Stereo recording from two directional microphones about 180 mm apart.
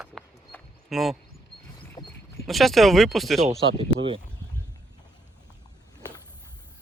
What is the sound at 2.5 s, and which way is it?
Speech, centre (ahead or behind).